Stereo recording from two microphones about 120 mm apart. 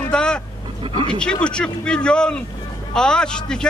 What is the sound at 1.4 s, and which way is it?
A man's voice, 10° left (ahead or behind).